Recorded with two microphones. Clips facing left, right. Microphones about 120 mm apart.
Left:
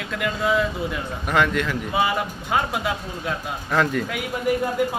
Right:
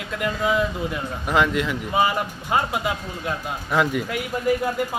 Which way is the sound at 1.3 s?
20° right (ahead or behind).